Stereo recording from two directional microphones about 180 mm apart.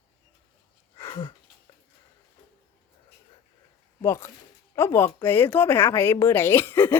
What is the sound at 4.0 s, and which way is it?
A woman's voice, 15° left (ahead or behind).